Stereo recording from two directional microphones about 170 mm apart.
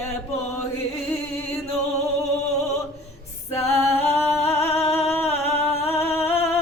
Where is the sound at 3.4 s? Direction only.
15° left (ahead or behind).